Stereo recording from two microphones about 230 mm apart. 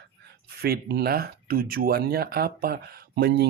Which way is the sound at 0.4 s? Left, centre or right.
Right.